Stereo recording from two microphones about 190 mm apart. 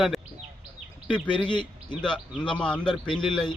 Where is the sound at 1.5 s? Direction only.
25° left (ahead or behind).